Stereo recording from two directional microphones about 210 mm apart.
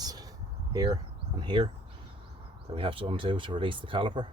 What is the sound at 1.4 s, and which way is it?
Speech, 25° right (ahead or behind).